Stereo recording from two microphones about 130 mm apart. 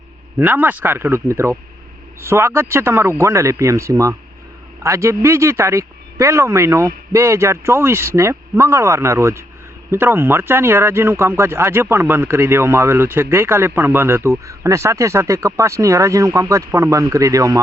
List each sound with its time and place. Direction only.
0.3 s a man's voice: 15° right (ahead or behind)